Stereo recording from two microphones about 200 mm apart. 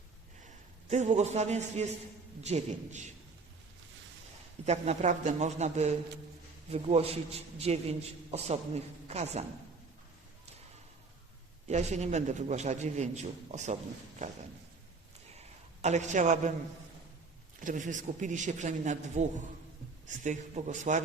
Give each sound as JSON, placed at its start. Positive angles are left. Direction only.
{"t": 0.4, "sound": "a man's voice", "side_deg": -35}
{"t": 4.6, "sound": "a man's voice", "side_deg": -35}
{"t": 11.7, "sound": "a man's voice", "side_deg": -35}
{"t": 15.8, "sound": "a man's voice", "side_deg": -35}
{"t": 17.6, "sound": "a man's voice", "side_deg": -40}